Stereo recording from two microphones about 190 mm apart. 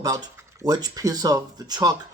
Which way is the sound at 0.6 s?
20° right (ahead or behind).